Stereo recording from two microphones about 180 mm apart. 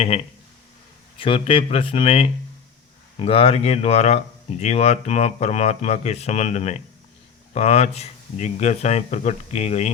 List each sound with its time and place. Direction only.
1.2 s speech: 30° left (ahead or behind)